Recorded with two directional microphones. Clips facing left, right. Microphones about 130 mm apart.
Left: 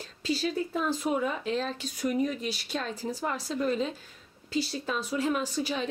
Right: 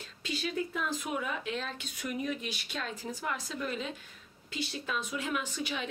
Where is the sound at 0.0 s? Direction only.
35° left (ahead or behind).